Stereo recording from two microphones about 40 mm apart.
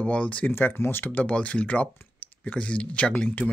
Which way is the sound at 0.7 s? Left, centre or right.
Left.